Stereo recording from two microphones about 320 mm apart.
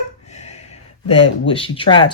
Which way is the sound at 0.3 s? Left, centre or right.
Left.